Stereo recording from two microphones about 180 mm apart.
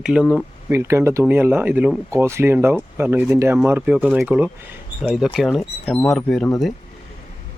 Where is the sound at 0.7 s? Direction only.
15° right (ahead or behind); by 6.7 s centre (ahead or behind).